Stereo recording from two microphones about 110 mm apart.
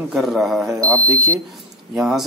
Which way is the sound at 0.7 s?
30° right (ahead or behind).